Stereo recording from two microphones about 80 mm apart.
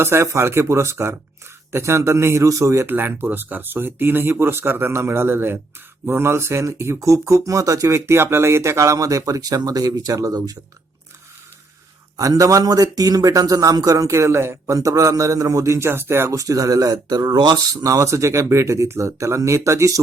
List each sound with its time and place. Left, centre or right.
0.0 s speech: right
2.8 s speech: right
12.1 s a man's voice: right
16.3 s a man's voice: right